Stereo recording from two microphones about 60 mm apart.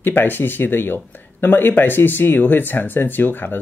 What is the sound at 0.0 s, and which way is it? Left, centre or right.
Speech, left.